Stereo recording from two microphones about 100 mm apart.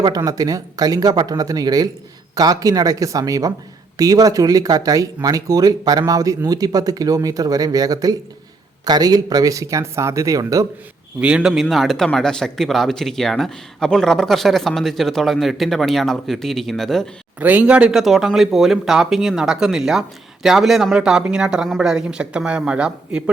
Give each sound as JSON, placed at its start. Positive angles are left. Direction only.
{"t": 0.3, "sound": "speech", "side_deg": -35}
{"t": 11.2, "sound": "speech", "side_deg": -10}
{"t": 11.5, "sound": "speech", "side_deg": 0}
{"t": 17.4, "sound": "speech", "side_deg": -15}